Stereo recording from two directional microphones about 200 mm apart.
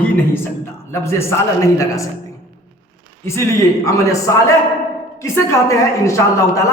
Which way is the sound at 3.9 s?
15° left (ahead or behind).